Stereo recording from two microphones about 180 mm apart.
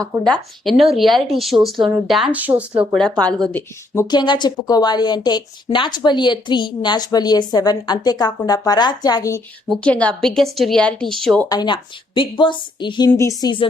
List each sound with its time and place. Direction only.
0.3 s speech: centre (ahead or behind)
2.9 s speech: 5° left (ahead or behind)
3.9 s a woman's voice: 25° left (ahead or behind)
9.6 s speech: 5° left (ahead or behind)
11.4 s a woman's voice: 25° left (ahead or behind)